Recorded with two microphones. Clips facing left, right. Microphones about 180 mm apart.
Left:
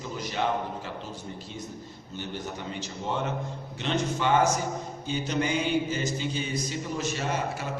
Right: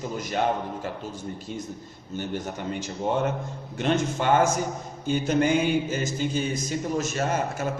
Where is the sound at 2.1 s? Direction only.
50° right (ahead or behind).